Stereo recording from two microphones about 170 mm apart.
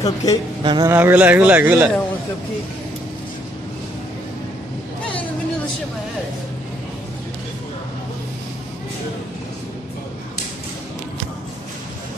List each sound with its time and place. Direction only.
0.0 s a woman's voice: 20° left (ahead or behind)
0.7 s a man's voice: 25° right (ahead or behind)
0.9 s speech: 10° right (ahead or behind)